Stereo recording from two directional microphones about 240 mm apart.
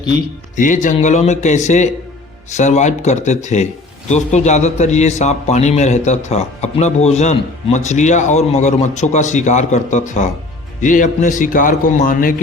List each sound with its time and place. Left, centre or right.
0.5 s a man's voice: left